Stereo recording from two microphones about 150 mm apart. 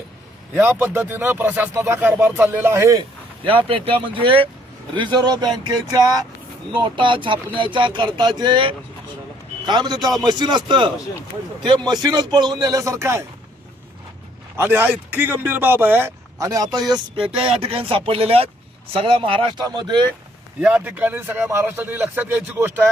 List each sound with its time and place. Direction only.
0.5 s speech: 15° right (ahead or behind)
3.0 s a man's voice: 35° right (ahead or behind); by 13.2 s 20° right (ahead or behind)
14.5 s speech: 15° right (ahead or behind)
16.9 s speech: 35° right (ahead or behind)
20.6 s speech: 10° right (ahead or behind)